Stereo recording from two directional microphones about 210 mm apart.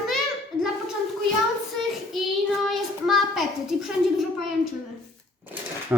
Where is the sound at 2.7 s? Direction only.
Centre (ahead or behind).